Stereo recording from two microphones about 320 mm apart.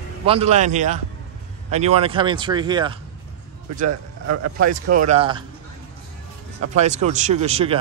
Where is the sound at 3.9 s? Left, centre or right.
Right.